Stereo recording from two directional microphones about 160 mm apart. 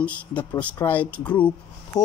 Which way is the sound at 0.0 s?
10° left (ahead or behind).